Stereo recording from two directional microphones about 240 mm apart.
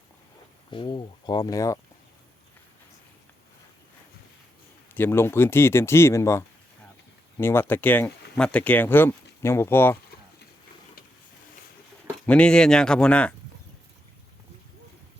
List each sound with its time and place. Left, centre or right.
0.7 s speech: centre
4.9 s speech: centre
12.2 s speech: centre